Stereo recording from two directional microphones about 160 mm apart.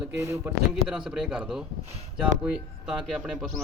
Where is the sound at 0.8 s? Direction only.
5° right (ahead or behind).